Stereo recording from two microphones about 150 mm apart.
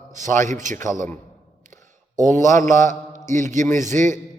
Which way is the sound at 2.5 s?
55° right (ahead or behind).